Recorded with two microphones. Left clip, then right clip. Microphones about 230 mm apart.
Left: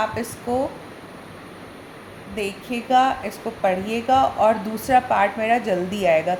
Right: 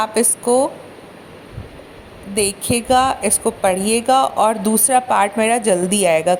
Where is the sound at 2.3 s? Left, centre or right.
Right.